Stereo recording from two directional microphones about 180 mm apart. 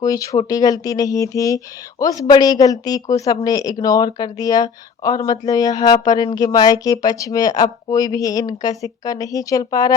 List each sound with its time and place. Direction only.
0.0 s speech: 20° left (ahead or behind)